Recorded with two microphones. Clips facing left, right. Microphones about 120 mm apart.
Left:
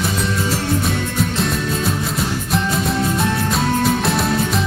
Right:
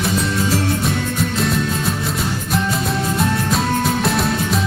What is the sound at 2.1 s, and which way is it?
Music, centre (ahead or behind).